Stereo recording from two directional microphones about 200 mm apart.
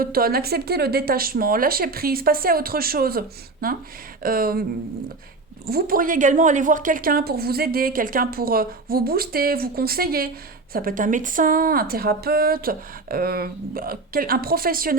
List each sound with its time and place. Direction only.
0.0 s a woman's voice: 50° right (ahead or behind)
5.6 s a woman's voice: 50° right (ahead or behind)